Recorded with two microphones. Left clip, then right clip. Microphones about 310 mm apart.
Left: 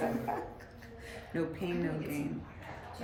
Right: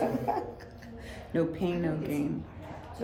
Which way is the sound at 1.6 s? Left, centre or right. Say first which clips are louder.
Right 5 dB; centre.